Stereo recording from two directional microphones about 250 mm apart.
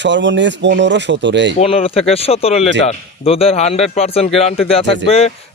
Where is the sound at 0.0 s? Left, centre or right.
Right.